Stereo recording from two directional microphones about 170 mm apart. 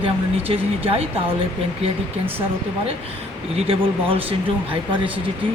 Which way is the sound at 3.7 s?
30° right (ahead or behind).